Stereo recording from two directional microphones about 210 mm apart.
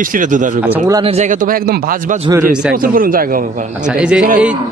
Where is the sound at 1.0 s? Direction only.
30° right (ahead or behind).